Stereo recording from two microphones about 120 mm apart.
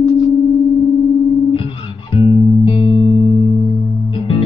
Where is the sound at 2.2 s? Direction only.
50° left (ahead or behind).